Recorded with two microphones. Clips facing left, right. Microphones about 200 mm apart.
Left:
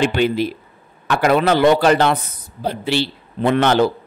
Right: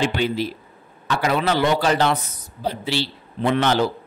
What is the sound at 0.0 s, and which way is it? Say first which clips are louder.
A man's voice: left 5 dB; 60° left (ahead or behind).